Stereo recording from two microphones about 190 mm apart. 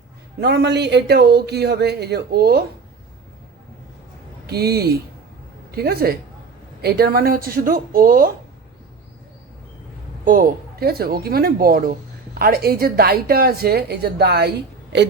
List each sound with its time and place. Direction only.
0.3 s speech: 60° right (ahead or behind)
4.4 s a woman's voice: 55° right (ahead or behind)
10.2 s a woman's voice: 45° right (ahead or behind)